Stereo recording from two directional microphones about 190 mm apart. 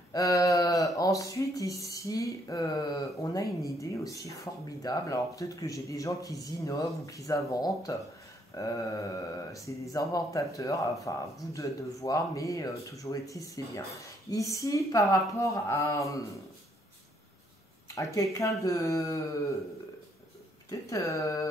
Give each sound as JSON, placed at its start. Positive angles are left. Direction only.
{"t": 0.1, "sound": "speech", "side_deg": 15}
{"t": 17.9, "sound": "speech", "side_deg": 15}
{"t": 20.9, "sound": "speech", "side_deg": 15}